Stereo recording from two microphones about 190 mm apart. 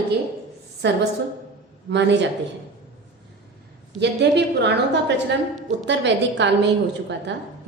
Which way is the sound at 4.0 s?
65° right (ahead or behind).